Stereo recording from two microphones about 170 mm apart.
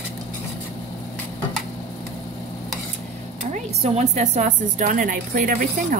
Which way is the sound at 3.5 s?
40° right (ahead or behind).